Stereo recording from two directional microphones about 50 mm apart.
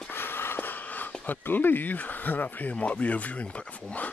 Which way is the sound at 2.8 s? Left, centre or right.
Left.